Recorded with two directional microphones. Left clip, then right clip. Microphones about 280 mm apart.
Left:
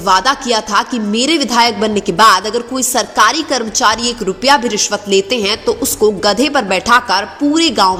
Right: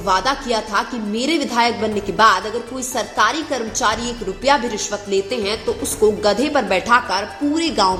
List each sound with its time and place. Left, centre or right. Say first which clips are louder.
0.0 s a woman's voice: left 6 dB; left